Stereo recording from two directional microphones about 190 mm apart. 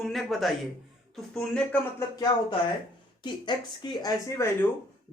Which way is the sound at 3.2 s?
25° left (ahead or behind).